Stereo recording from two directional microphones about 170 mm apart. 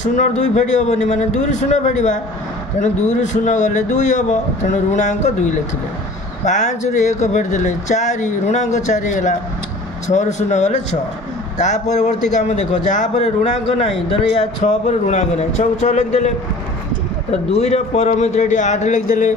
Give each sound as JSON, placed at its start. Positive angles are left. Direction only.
{"t": 0.0, "sound": "a man's voice", "side_deg": 45}
{"t": 17.5, "sound": "a man's voice", "side_deg": 40}